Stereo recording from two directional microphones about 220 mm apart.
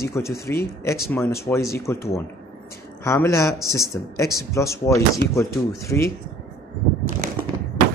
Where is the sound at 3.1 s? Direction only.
15° left (ahead or behind).